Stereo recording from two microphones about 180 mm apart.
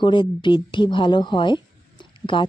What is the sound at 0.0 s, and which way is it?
Speech, 25° left (ahead or behind).